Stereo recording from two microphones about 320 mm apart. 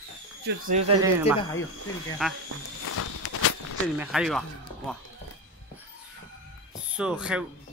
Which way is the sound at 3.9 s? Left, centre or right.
Centre.